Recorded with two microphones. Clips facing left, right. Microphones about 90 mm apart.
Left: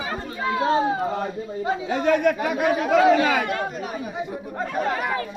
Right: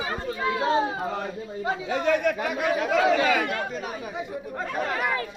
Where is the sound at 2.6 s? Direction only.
30° left (ahead or behind).